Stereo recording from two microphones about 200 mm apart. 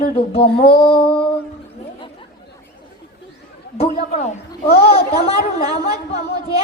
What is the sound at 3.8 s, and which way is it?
A woman's voice, 35° left (ahead or behind).